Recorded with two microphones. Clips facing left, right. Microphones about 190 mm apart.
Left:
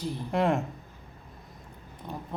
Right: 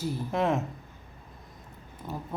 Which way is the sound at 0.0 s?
Centre (ahead or behind).